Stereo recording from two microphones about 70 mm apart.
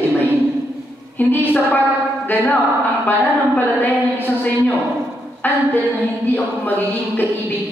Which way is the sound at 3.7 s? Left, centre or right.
Left.